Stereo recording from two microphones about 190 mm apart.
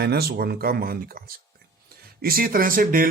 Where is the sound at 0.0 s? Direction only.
55° right (ahead or behind).